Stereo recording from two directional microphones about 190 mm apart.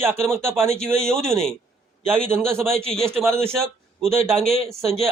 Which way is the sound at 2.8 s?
30° right (ahead or behind).